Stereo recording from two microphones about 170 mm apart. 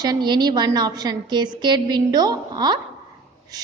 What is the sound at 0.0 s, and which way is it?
A woman's voice, 25° right (ahead or behind).